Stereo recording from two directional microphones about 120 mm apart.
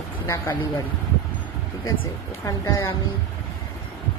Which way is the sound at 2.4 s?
30° left (ahead or behind).